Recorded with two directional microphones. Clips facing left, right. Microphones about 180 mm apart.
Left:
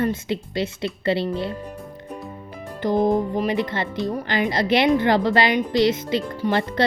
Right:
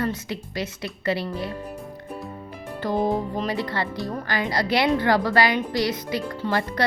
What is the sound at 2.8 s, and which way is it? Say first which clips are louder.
Speech: left 4 dB; 20° left (ahead or behind).